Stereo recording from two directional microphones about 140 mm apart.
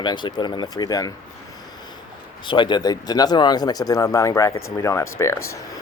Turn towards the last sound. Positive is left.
turn(degrees=20)  # may be behind; listen again after turning